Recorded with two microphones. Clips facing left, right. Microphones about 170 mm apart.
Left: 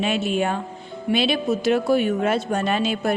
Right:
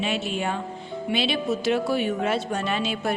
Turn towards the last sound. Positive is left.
turn(degrees=50)  # may be behind; listen again after turning